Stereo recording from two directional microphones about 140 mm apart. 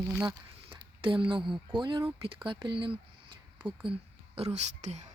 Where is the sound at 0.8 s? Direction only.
40° right (ahead or behind).